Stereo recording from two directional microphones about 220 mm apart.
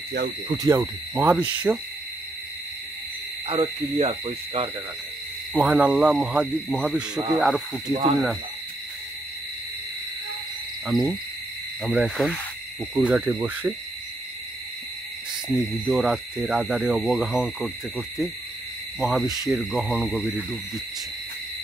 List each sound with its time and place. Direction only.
0.6 s hoot: 15° right (ahead or behind)
3.4 s owl: 25° right (ahead or behind)
5.5 s owl: 5° right (ahead or behind)
7.9 s owl: 20° right (ahead or behind)
10.9 s owl: centre (ahead or behind)
12.9 s hoot: 5° right (ahead or behind)
15.4 s owl: 5° right (ahead or behind)